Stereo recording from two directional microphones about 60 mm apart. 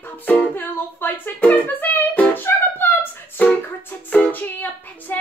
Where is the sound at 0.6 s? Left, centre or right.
Left.